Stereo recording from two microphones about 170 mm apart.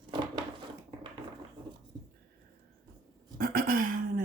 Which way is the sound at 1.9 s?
25° right (ahead or behind).